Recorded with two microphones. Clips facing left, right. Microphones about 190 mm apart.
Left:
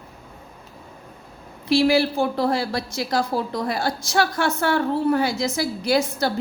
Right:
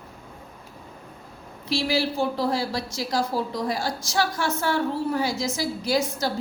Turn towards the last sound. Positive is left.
turn(degrees=65)  # may be behind; listen again after turning